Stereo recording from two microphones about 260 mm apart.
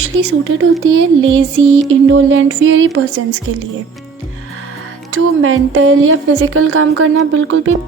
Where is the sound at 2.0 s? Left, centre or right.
Right.